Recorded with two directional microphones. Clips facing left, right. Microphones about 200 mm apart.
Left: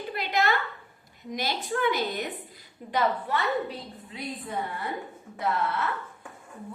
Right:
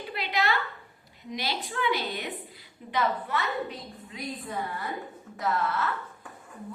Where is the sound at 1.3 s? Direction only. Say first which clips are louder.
Left 3 dB; 50° left (ahead or behind).